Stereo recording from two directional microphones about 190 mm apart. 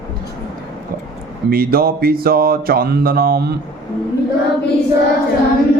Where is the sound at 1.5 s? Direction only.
50° right (ahead or behind).